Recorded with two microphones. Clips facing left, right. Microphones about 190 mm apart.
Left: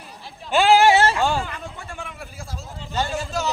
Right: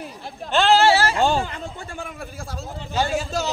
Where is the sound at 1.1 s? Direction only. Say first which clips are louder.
Right 2 dB; 25° right (ahead or behind).